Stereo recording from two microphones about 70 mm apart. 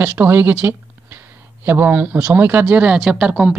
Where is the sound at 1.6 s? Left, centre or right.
Right.